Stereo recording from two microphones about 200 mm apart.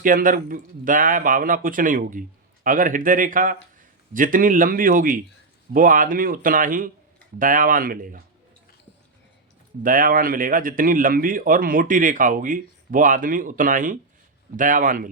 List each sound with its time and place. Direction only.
0.0 s speech: 45° right (ahead or behind)
9.8 s speech: 45° right (ahead or behind)